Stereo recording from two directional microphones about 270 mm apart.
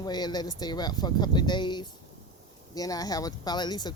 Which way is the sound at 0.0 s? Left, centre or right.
Centre.